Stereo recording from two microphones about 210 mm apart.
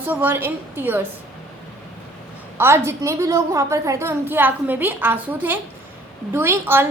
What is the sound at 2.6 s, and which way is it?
A woman's voice, 10° right (ahead or behind).